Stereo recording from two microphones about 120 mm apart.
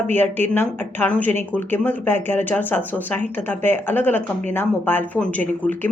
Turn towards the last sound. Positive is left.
turn(degrees=15)  # may be behind; listen again after turning